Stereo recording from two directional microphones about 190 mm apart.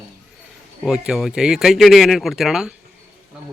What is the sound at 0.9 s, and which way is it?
Speech, centre (ahead or behind).